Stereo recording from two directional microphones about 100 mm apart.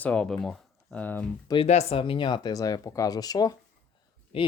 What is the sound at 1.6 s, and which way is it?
Speech, 85° left.